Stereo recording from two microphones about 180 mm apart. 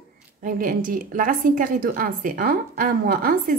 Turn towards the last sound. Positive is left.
turn(degrees=-55)  # may be behind; listen again after turning